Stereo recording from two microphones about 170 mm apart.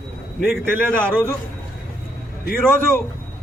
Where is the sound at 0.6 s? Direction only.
10° right (ahead or behind).